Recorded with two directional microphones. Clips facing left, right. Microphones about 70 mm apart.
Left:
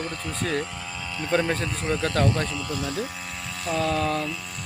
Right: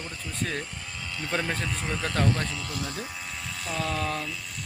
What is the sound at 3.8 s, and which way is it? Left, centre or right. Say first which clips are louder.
Speech: left 5 dB; left.